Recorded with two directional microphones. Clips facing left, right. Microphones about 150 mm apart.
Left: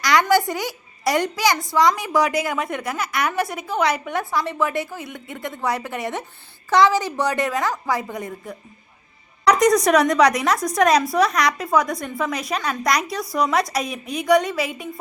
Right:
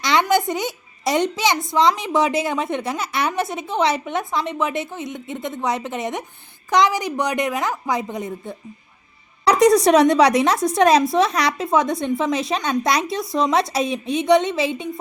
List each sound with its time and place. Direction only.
0.0 s a child's voice: 25° right (ahead or behind)